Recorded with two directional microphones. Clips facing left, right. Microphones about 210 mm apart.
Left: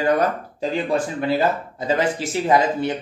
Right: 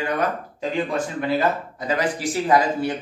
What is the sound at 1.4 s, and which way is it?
Speech, 25° left (ahead or behind).